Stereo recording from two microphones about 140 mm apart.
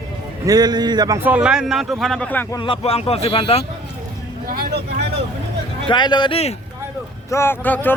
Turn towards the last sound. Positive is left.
turn(degrees=15)  # may be behind; listen again after turning